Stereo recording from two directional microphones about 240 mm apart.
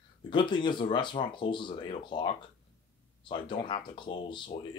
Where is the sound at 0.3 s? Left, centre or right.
Centre.